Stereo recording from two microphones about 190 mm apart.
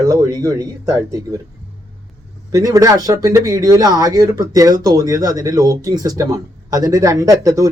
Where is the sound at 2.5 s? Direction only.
20° right (ahead or behind).